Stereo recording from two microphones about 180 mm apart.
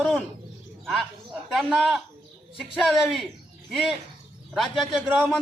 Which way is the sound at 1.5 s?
Centre (ahead or behind).